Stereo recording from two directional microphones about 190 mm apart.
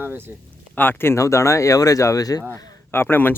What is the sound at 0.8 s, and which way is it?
Speech, 10° left (ahead or behind).